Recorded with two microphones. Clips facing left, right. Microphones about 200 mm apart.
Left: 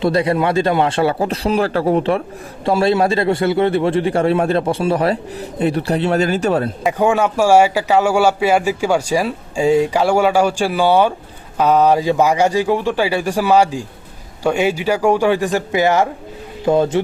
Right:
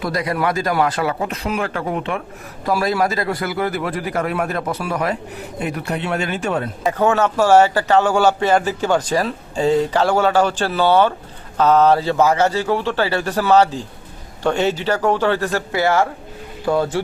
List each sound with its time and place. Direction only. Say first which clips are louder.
0.0 s a man's voice: left 5 dB; 30° left (ahead or behind)
6.9 s a man's voice: left 1 dB; 10° left (ahead or behind)